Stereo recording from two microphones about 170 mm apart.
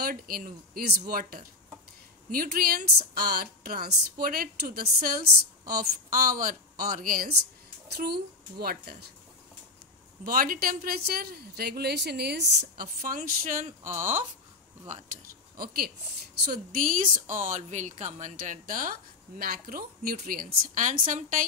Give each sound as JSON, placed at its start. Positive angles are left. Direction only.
{"t": 0.0, "sound": "a woman's voice", "side_deg": -55}
{"t": 7.9, "sound": "speech", "side_deg": -70}
{"t": 10.2, "sound": "a woman's voice", "side_deg": -55}
{"t": 13.8, "sound": "speech", "side_deg": -15}
{"t": 15.6, "sound": "a woman's voice", "side_deg": -60}